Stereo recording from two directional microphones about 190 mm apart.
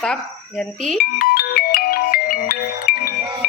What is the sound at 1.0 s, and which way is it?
Music, 50° left (ahead or behind).